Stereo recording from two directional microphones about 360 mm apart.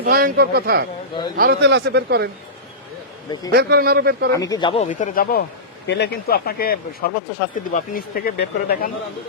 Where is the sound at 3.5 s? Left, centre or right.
Right.